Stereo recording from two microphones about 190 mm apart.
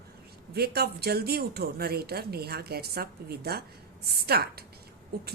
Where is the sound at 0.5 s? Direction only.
55° right (ahead or behind).